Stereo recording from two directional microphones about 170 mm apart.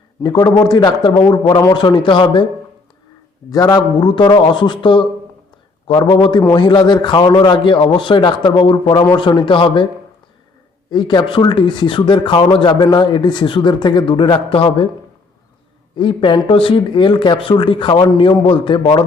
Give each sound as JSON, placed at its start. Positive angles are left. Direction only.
{"t": 0.2, "sound": "speech", "side_deg": 25}
{"t": 3.5, "sound": "speech", "side_deg": 20}
{"t": 10.9, "sound": "speech", "side_deg": 25}
{"t": 16.0, "sound": "speech", "side_deg": 30}